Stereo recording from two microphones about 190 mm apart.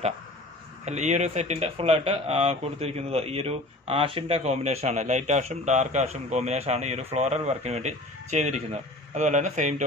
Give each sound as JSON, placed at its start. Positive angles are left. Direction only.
{"t": 0.8, "sound": "speech", "side_deg": -40}